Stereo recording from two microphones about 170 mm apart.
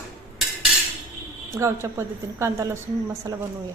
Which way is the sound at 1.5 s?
15° right (ahead or behind).